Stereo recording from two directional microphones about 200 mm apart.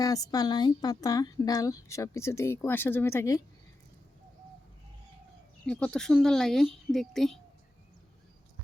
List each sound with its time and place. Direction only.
0.0 s speech: 20° left (ahead or behind)
5.6 s speech: 5° left (ahead or behind)